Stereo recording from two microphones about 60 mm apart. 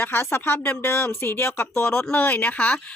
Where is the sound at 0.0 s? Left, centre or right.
Left.